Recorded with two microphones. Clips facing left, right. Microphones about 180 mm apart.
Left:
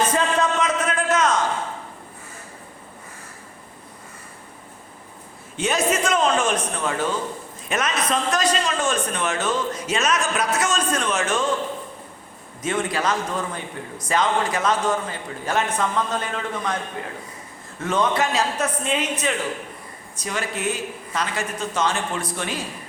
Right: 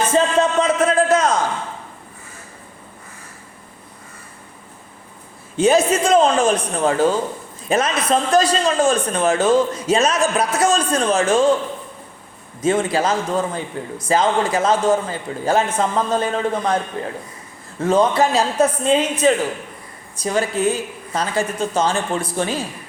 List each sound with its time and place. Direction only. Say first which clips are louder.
0.1 s music: right 5 dB; 30° right (ahead or behind)
5.5 s a man's voice: right 7 dB; 30° right (ahead or behind)
12.6 s a man's voice: right 6 dB; 30° right (ahead or behind)